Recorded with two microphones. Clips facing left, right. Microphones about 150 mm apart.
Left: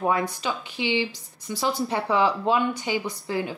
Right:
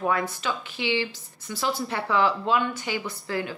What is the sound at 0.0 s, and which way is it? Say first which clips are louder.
Speech: left 2 dB; 20° left (ahead or behind).